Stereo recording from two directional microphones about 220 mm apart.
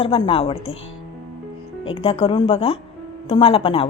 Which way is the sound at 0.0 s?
25° left (ahead or behind).